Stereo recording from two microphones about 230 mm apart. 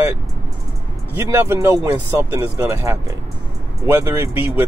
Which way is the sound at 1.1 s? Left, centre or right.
Centre.